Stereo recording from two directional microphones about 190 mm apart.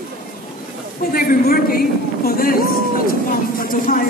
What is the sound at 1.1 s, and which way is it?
A man's voice, 50° left (ahead or behind).